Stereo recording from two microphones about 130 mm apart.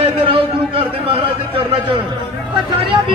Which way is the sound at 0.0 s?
45° right (ahead or behind).